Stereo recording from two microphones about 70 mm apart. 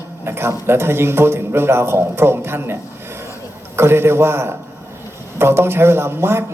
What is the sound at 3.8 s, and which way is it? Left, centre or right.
A man's voice, right.